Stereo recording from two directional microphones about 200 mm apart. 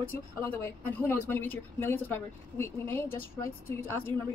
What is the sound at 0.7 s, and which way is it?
A woman's voice, 10° left (ahead or behind).